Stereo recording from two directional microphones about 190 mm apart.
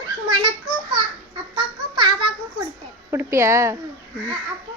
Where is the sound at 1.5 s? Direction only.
25° right (ahead or behind).